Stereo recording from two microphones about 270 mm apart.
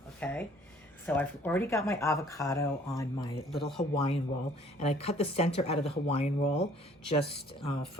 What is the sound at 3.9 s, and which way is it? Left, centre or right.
Speech, left.